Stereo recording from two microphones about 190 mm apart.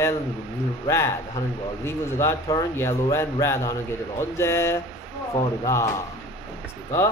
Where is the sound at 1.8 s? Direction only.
15° left (ahead or behind).